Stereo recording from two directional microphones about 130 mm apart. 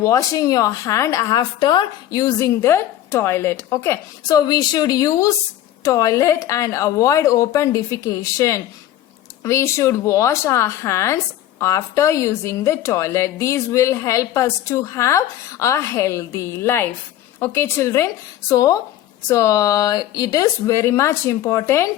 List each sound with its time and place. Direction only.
0.0 s a woman's voice: 25° left (ahead or behind)